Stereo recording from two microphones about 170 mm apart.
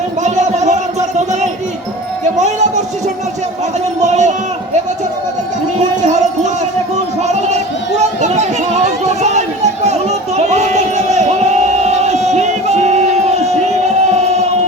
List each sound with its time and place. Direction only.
0.2 s music: 45° right (ahead or behind)
4.0 s a sound: 45° right (ahead or behind)
6.0 s a sound: 45° right (ahead or behind)
6.9 s music: 40° right (ahead or behind)
8.2 s chatter: 40° right (ahead or behind)
9.8 s crowd: 40° right (ahead or behind)